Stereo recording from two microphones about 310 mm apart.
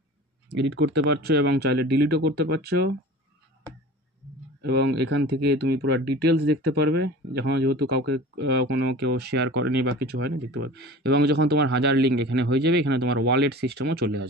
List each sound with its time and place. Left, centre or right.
0.5 s speech: right
4.6 s speech: right